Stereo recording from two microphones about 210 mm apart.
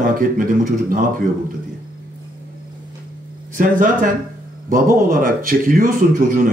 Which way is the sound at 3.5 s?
40° right (ahead or behind).